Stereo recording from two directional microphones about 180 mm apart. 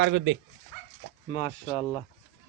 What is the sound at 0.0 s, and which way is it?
Speech, 75° right (ahead or behind).